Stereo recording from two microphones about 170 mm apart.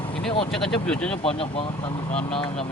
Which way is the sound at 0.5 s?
5° left (ahead or behind).